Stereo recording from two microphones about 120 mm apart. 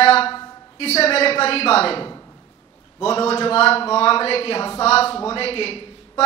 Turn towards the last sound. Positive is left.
turn(degrees=50)  # may be behind; listen again after turning